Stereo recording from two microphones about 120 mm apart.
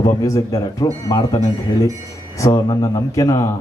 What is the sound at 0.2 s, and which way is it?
A man's voice, 30° left (ahead or behind).